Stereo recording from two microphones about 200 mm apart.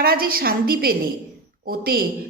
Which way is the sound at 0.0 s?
50° right (ahead or behind).